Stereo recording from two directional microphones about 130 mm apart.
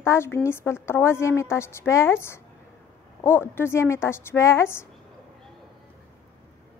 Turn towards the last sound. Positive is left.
turn(degrees=20)  # may be behind; listen again after turning